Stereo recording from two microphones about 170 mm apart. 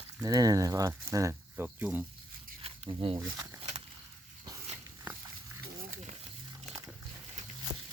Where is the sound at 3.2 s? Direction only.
20° right (ahead or behind).